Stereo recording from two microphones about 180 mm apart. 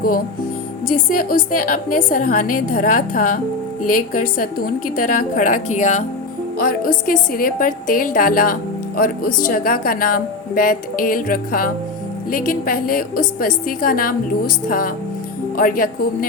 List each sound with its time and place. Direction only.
0.9 s speech: 50° left (ahead or behind)
6.6 s speech: 55° left (ahead or behind)